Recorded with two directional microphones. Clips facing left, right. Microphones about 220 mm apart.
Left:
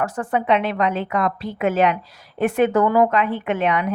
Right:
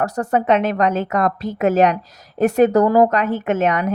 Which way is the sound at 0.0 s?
40° right (ahead or behind).